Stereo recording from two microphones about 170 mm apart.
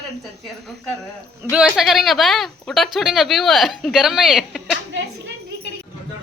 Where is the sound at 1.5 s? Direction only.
5° right (ahead or behind).